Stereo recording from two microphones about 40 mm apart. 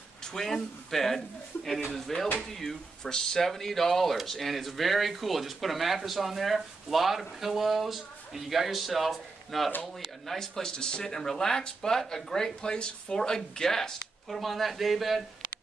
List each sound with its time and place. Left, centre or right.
0.2 s speech: centre
14.3 s speech: centre